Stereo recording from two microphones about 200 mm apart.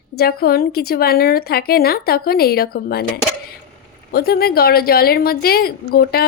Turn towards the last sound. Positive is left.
turn(degrees=50)  # may be behind; listen again after turning